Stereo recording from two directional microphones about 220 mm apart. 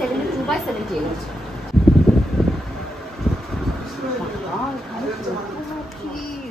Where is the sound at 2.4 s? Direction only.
Centre (ahead or behind).